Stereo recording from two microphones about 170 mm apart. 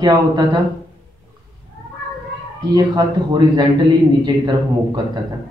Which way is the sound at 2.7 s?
25° right (ahead or behind).